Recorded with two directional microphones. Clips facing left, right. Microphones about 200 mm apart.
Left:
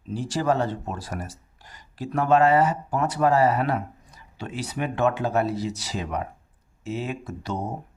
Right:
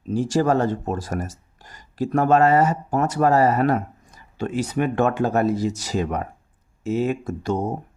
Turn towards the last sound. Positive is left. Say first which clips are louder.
# right 8 dB
turn(degrees=-45)  # may be behind; listen again after turning